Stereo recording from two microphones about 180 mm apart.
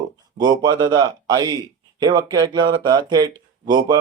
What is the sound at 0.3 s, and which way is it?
Speech, 25° right (ahead or behind).